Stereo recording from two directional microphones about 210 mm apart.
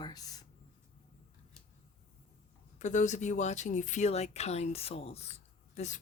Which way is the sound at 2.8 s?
35° left (ahead or behind).